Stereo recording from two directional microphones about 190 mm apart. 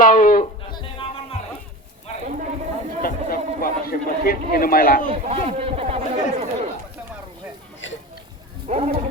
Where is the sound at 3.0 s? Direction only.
50° left (ahead or behind).